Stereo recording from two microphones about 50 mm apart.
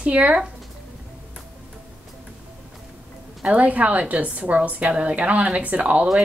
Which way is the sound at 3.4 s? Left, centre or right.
Right.